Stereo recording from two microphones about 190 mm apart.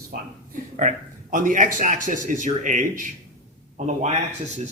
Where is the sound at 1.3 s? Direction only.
45° right (ahead or behind).